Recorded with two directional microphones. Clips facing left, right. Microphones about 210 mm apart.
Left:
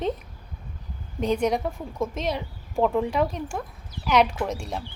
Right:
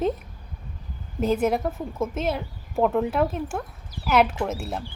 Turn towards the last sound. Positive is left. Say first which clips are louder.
# right 1 dB
turn(degrees=-5)  # may be behind; listen again after turning